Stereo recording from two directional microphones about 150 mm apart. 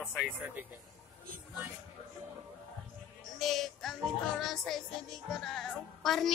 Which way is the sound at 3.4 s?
Centre (ahead or behind).